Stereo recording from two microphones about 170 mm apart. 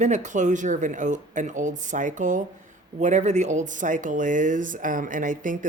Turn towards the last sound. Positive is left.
turn(degrees=-50)  # may be behind; listen again after turning